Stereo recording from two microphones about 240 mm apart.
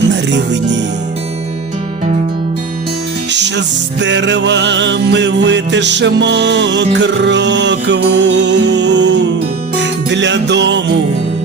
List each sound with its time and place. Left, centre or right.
0.1 s music: right
4.0 s music: right